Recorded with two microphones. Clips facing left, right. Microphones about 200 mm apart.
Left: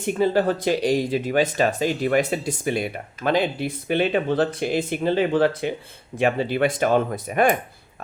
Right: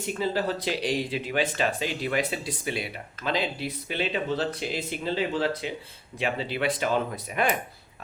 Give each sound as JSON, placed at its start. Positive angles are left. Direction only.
{"t": 0.0, "sound": "speech", "side_deg": 55}